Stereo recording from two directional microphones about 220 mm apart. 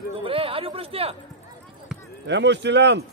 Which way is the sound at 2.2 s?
50° right (ahead or behind).